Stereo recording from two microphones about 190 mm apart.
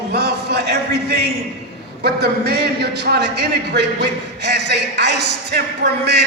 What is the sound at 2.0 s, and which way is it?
A man's voice, 55° right (ahead or behind).